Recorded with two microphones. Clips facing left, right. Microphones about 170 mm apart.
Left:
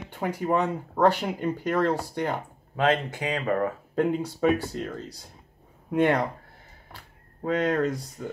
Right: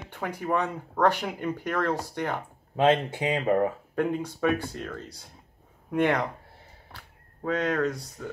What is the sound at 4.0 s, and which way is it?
Speech, 15° left (ahead or behind).